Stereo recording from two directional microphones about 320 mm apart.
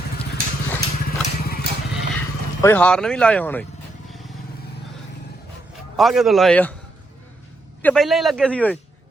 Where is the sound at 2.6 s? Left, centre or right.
Centre.